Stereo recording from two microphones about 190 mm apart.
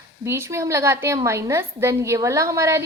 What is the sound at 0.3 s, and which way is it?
A woman's voice, 15° right (ahead or behind).